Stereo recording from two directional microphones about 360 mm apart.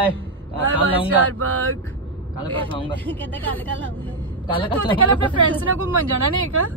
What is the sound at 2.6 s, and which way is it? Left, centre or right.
Speech, centre.